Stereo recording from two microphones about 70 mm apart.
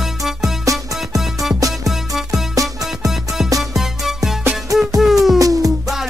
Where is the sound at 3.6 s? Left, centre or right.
Centre.